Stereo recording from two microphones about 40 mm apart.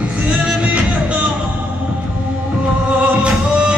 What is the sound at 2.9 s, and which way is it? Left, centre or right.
Music, right.